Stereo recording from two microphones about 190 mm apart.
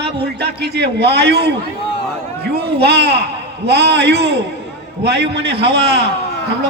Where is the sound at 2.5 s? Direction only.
60° right (ahead or behind).